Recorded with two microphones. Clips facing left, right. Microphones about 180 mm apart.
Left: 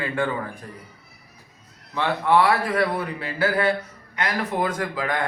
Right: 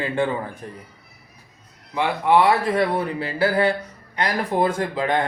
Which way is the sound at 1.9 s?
15° right (ahead or behind).